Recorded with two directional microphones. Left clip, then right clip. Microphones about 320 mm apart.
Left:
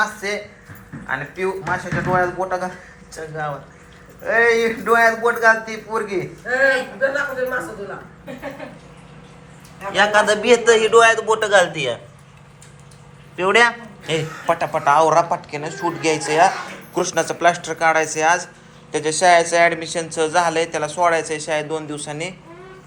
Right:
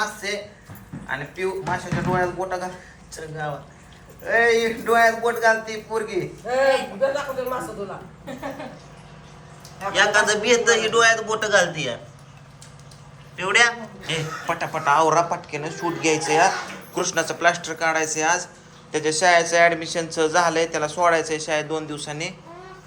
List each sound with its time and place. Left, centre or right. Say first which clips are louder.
0.0 s a sound: left 5 dB; centre
1.0 s a man's voice: left 4 dB; centre
9.9 s a man's voice: left 3 dB; centre
13.3 s a man's voice: left 3 dB; centre